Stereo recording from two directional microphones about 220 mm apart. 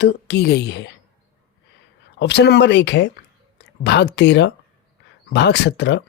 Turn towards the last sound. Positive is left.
turn(degrees=50)  # may be behind; listen again after turning